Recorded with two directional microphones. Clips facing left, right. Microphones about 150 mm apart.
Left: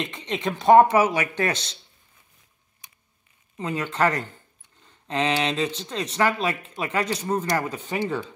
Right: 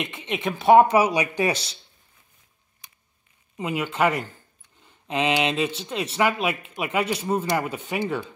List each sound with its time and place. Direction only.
0.3 s speech: 5° right (ahead or behind)
3.5 s speech: 10° right (ahead or behind)